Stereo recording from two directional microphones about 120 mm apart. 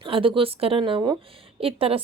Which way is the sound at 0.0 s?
45° right (ahead or behind).